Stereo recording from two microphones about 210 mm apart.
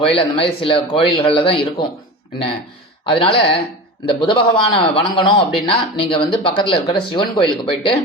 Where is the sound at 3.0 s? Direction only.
25° left (ahead or behind).